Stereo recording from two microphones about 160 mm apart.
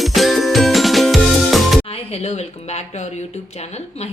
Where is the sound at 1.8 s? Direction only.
35° left (ahead or behind).